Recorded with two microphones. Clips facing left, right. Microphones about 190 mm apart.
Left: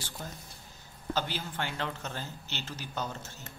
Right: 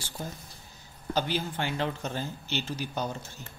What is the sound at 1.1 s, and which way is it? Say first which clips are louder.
Speech: right 4 dB; 15° right (ahead or behind).